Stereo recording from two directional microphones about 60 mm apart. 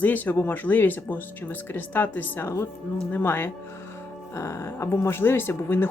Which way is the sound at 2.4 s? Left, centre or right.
Left.